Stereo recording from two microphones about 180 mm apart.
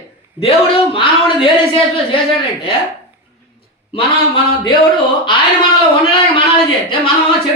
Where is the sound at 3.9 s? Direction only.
30° left (ahead or behind).